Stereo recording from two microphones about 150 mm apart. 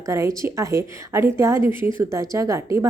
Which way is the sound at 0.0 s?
20° right (ahead or behind).